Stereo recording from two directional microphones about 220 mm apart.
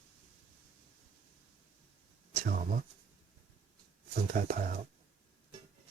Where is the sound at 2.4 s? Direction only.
35° right (ahead or behind).